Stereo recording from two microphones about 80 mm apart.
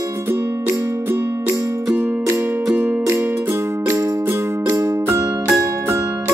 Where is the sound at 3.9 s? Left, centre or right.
Right.